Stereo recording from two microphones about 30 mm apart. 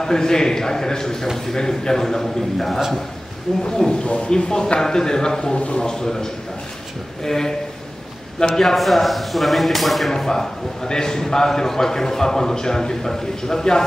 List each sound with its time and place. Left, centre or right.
0.0 s a man's voice: left
2.2 s a man's voice: centre
3.6 s a man's voice: left
3.9 s speech: left
4.3 s a man's voice: left
7.2 s a man's voice: centre
8.5 s speech: centre
10.1 s a man's voice: centre